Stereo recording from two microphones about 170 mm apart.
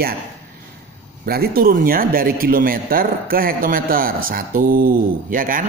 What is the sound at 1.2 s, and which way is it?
Speech, 65° right (ahead or behind).